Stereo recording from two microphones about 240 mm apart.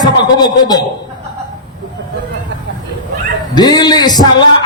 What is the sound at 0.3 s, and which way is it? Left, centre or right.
Speech, centre.